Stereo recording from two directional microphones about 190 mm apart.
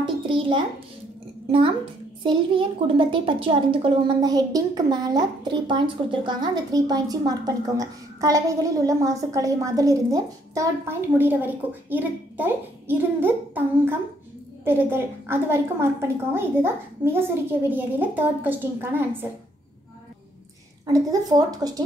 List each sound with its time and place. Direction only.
0.0 s a sound: 25° right (ahead or behind)
2.2 s a child's voice: 25° right (ahead or behind); by 19.0 s 10° right (ahead or behind)
20.8 s a child's voice: 20° right (ahead or behind)